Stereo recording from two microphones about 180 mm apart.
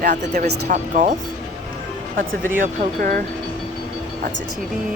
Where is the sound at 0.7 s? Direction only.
45° right (ahead or behind).